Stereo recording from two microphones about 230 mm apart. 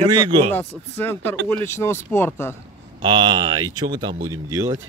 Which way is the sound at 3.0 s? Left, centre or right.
Centre.